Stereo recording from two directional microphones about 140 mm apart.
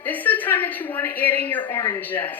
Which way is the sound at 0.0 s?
10° left (ahead or behind).